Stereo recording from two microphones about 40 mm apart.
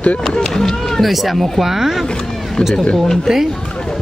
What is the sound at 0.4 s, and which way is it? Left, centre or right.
Run, centre.